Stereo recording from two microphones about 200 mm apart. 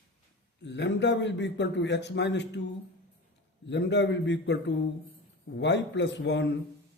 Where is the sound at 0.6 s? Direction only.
60° left (ahead or behind).